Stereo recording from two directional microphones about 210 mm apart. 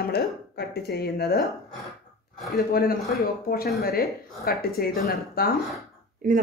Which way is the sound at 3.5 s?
45° left (ahead or behind).